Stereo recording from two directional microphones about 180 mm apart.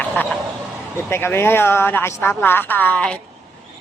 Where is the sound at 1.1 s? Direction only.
15° left (ahead or behind).